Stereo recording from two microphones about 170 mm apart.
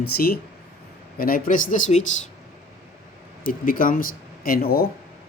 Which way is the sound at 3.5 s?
55° left (ahead or behind).